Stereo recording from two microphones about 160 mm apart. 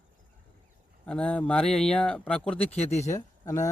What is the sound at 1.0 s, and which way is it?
Speech, 5° left (ahead or behind).